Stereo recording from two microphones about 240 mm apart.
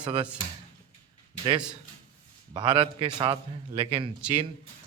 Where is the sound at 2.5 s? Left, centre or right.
Centre.